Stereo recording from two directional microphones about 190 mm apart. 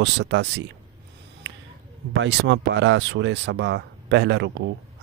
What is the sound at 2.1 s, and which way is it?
Speech, 70° right (ahead or behind).